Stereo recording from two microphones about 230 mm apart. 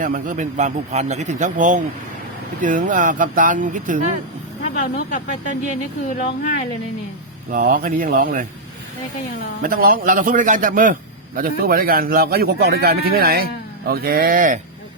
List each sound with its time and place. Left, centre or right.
0.0 s speech: right
4.8 s speech: left
7.5 s speech: right
9.6 s speech: right